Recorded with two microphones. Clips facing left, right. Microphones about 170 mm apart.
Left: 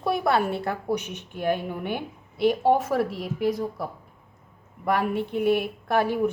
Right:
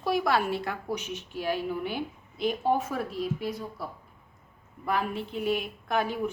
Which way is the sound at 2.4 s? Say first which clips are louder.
Left 6 dB; 80° left.